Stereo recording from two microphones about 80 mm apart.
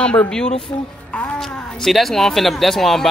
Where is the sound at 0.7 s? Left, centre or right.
Left.